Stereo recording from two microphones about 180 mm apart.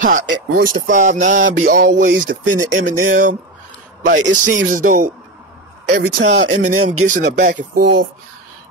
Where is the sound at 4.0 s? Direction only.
90° right.